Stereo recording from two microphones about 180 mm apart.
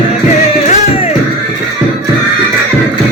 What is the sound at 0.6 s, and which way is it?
Music, 35° left (ahead or behind).